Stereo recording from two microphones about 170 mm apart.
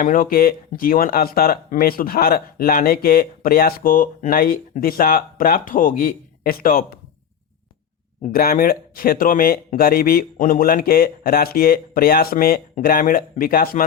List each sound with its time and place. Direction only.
0.0 s speech: 55° left (ahead or behind)
8.2 s speech: 60° left (ahead or behind)